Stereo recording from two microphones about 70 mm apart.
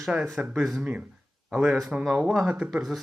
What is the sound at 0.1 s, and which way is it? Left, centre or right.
Speech, centre.